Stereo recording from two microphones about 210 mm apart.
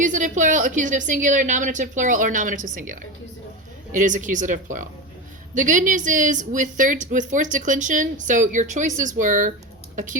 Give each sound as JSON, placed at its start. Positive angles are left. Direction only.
{"t": 0.0, "sound": "a woman's voice", "side_deg": -35}